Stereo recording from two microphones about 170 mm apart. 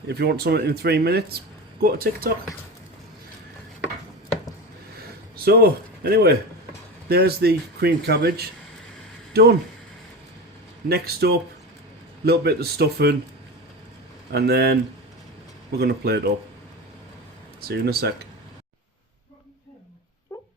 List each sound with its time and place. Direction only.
0.1 s speech: 70° right (ahead or behind)
5.5 s speech: 65° right (ahead or behind)
10.8 s speech: 65° right (ahead or behind)
14.3 s speech: 70° right (ahead or behind)
15.8 s speech: 70° right (ahead or behind)
17.7 s speech: 70° right (ahead or behind)
20.3 s a sound: 20° left (ahead or behind)